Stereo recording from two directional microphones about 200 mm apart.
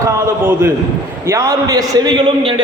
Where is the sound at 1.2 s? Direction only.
15° right (ahead or behind).